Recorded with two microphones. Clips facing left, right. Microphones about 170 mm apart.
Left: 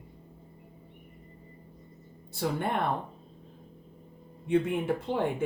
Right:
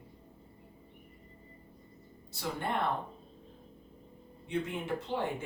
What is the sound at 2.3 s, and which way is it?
Speech, 55° left (ahead or behind).